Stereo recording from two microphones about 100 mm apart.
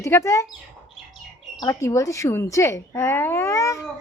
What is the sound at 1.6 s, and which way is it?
Speech, 30° left (ahead or behind).